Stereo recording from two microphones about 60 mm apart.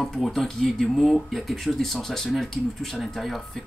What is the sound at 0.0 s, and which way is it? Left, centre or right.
Speech, centre.